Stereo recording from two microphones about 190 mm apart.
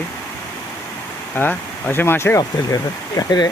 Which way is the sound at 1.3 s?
10° left (ahead or behind).